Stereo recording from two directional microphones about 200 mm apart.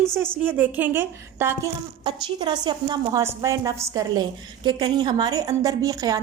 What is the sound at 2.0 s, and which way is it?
A woman's voice, 20° right (ahead or behind).